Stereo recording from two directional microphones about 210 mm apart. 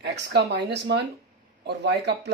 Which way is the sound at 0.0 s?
55° right (ahead or behind).